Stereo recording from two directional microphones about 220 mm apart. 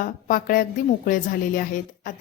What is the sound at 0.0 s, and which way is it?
Speech, 40° left (ahead or behind).